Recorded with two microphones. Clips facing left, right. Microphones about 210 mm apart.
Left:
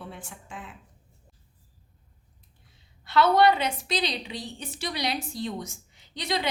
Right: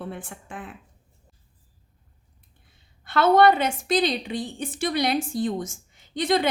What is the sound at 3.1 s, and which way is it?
A woman's voice, 50° right (ahead or behind).